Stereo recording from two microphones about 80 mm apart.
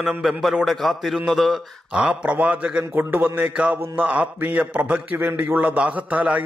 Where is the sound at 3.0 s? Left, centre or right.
Right.